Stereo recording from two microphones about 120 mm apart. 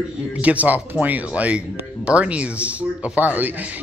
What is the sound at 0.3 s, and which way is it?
Speech, 10° right (ahead or behind).